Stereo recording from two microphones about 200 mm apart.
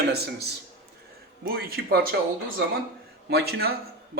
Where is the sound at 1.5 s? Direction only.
50° right (ahead or behind).